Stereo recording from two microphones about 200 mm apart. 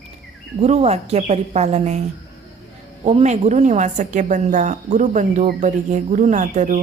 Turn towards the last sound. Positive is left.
turn(degrees=-40)  # may be behind; listen again after turning